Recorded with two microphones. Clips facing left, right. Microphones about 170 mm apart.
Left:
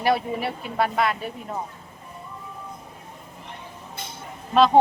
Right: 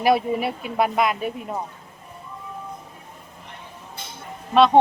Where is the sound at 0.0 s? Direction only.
15° right (ahead or behind).